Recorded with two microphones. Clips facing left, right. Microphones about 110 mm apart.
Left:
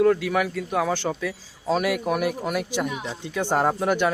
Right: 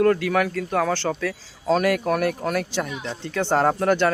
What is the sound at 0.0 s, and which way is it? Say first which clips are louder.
A man's voice: right 1 dB; 5° left (ahead or behind).